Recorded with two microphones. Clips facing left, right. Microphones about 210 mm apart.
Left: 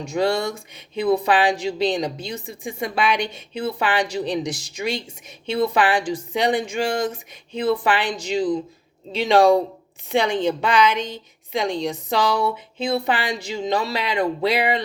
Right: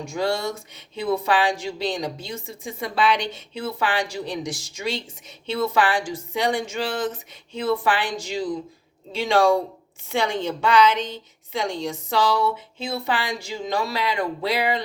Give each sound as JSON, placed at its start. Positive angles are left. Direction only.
{"t": 0.1, "sound": "speech", "side_deg": 20}